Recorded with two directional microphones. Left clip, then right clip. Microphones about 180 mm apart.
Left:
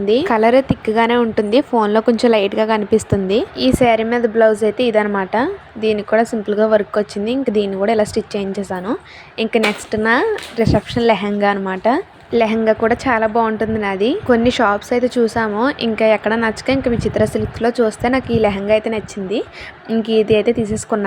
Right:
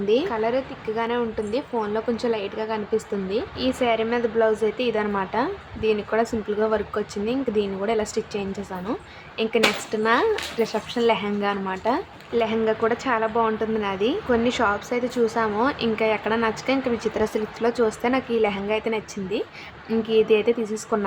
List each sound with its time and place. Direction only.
0.0 s a woman's voice: 30° left (ahead or behind)
0.3 s a woman's voice: 45° left (ahead or behind); by 21.0 s 30° left (ahead or behind)